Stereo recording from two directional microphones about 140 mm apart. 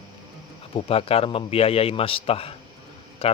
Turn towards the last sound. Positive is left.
turn(degrees=45)  # may be behind; listen again after turning